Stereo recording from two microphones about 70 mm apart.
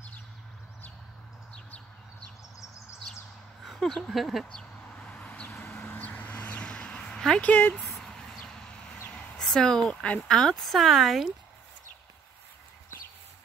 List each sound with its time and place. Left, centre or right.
3.6 s speech: centre
4.9 s vehicle: centre
5.8 s a sound: left
7.4 s speech: left
7.8 s a sound: centre
9.1 s speech: centre